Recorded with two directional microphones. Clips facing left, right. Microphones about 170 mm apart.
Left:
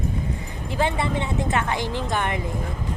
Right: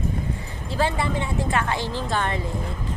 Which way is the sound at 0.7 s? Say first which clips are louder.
Even; 20° left (ahead or behind).